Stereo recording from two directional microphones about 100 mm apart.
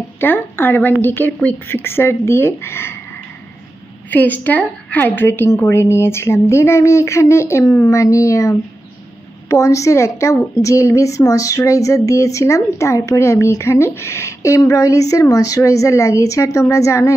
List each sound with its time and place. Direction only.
0.2 s a woman's voice: 20° left (ahead or behind)
4.1 s a woman's voice: 15° left (ahead or behind)